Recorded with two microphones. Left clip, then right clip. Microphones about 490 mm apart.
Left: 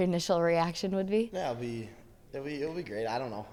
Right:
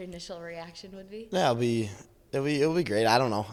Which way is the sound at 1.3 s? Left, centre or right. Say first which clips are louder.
Right 9 dB; right.